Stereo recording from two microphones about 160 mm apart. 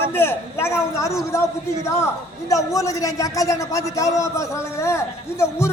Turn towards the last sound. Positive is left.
turn(degrees=15)  # may be behind; listen again after turning